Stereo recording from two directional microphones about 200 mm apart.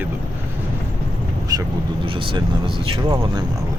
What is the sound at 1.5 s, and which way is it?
Speech, 20° right (ahead or behind).